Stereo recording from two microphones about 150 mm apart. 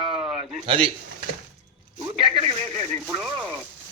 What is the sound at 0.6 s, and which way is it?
Speech, 35° right (ahead or behind).